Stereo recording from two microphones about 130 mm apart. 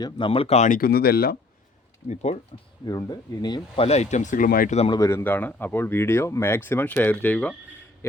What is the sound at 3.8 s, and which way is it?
Speech, 60° left (ahead or behind).